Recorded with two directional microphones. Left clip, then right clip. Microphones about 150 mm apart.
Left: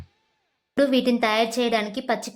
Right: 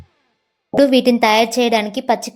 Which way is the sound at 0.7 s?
30° right (ahead or behind).